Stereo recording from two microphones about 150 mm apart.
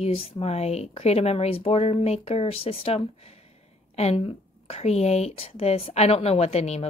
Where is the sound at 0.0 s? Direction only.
40° left (ahead or behind).